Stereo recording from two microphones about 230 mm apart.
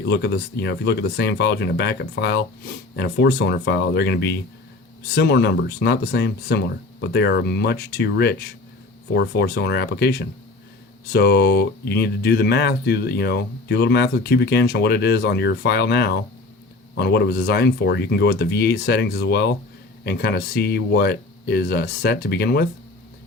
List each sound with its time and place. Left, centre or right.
0.0 s speech: left